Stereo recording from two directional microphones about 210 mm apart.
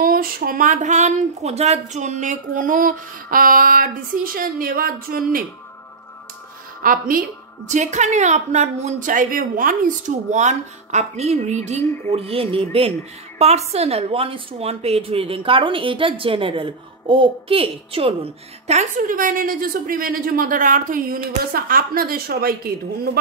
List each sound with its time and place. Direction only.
0.0 s a woman's voice: 45° right (ahead or behind)
6.8 s a woman's voice: 40° right (ahead or behind)